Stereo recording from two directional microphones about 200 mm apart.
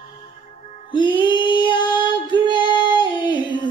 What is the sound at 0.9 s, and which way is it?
Child singing, 25° left (ahead or behind).